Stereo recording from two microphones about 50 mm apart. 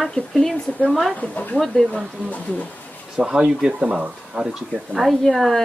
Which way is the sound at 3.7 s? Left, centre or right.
Right.